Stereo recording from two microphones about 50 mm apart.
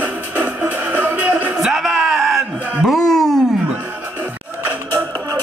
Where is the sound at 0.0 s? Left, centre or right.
Right.